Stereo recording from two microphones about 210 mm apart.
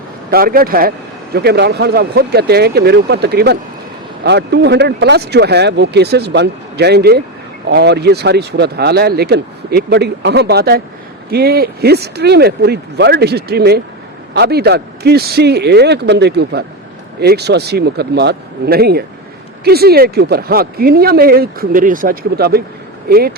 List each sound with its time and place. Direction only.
0.3 s speech: 45° right (ahead or behind)